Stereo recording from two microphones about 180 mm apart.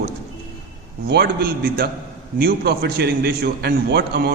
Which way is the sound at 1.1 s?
65° right (ahead or behind).